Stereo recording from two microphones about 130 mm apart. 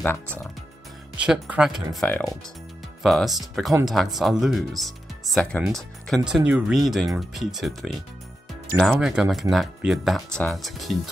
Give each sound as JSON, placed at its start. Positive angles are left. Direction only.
{"t": 0.0, "sound": "speech", "side_deg": 15}
{"t": 1.1, "sound": "speech", "side_deg": -10}
{"t": 2.0, "sound": "speech", "side_deg": 10}
{"t": 3.0, "sound": "speech", "side_deg": 0}